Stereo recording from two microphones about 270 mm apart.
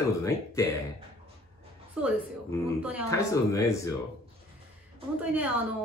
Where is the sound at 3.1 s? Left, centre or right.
Centre.